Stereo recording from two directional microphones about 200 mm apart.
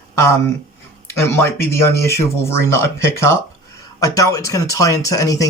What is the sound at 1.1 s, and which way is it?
Speech, 15° left (ahead or behind).